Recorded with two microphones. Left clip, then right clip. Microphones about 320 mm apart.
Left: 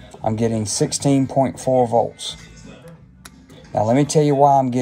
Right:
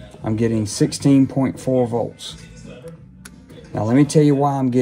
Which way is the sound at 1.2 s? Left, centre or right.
Left.